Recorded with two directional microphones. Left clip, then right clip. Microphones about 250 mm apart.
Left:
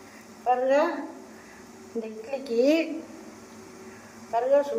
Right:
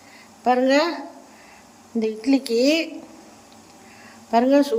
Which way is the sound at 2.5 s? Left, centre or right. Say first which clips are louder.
Right 1 dB; right.